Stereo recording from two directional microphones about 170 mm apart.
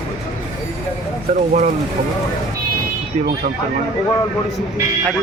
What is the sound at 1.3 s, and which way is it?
Speech, 45° right (ahead or behind).